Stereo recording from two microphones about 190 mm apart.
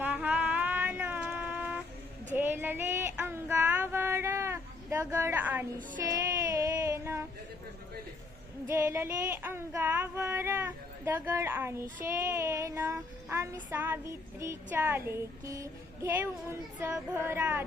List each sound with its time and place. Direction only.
0.0 s music: 10° right (ahead or behind)
2.3 s child singing: 10° right (ahead or behind)
8.6 s female singing: 15° right (ahead or behind)
12.0 s child singing: 15° right (ahead or behind)